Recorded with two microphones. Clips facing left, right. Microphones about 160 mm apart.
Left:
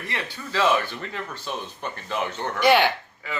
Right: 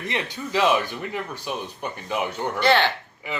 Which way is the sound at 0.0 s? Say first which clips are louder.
Right 4 dB; 20° right (ahead or behind).